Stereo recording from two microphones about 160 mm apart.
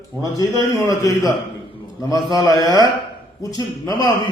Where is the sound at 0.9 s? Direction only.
20° left (ahead or behind).